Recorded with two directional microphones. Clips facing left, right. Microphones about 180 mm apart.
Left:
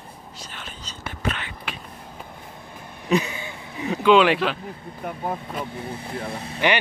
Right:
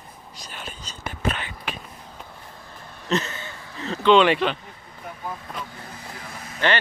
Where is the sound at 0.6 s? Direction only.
45° right (ahead or behind).